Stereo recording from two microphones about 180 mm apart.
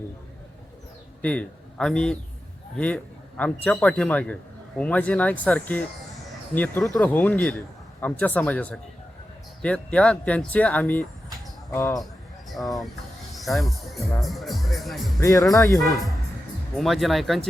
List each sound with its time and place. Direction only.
1.2 s a man's voice: 10° left (ahead or behind)
12.5 s speech: centre (ahead or behind)
15.2 s a man's voice: 20° left (ahead or behind)
16.7 s speech: centre (ahead or behind)